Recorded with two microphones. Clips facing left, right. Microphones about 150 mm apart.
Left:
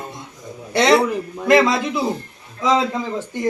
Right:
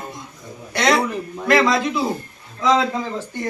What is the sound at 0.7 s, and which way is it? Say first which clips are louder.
A man's voice: left 4 dB; 25° left (ahead or behind).